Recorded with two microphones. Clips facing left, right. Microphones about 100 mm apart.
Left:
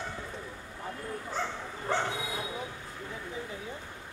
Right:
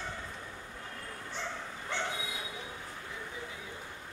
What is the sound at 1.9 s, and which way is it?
Bow-wow, 40° left (ahead or behind).